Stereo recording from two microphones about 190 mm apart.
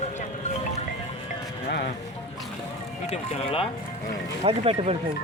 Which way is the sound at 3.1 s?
35° left (ahead or behind).